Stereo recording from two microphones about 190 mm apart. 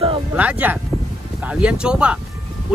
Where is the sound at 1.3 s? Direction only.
5° right (ahead or behind).